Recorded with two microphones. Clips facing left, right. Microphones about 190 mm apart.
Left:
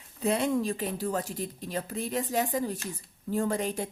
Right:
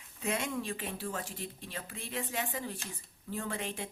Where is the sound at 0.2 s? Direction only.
35° left (ahead or behind).